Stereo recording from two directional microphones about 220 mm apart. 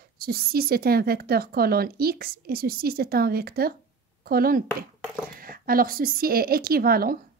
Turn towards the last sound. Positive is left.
turn(degrees=-45)  # may be behind; listen again after turning